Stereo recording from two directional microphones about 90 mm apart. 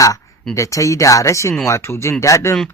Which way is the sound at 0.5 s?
35° left (ahead or behind).